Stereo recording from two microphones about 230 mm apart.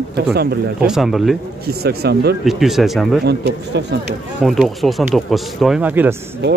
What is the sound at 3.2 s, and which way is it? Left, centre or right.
Speech, right.